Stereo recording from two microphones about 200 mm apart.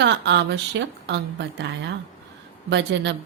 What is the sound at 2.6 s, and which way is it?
Speech, 60° right (ahead or behind).